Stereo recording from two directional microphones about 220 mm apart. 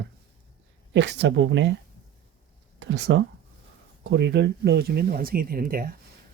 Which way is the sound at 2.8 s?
55° right (ahead or behind).